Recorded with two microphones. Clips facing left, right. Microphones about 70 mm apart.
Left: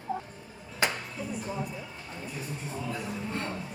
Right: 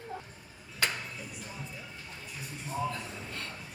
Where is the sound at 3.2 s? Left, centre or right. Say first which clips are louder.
Left 8 dB; left.